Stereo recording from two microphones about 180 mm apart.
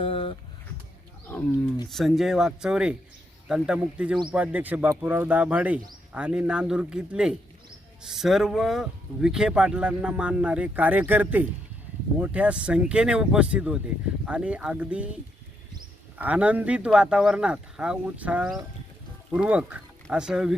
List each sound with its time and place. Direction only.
0.0 s a sound: 30° left (ahead or behind)
1.9 s speech: centre (ahead or behind)
16.1 s speech: 10° right (ahead or behind)